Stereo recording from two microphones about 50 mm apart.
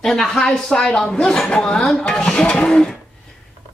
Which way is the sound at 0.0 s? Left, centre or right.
Centre.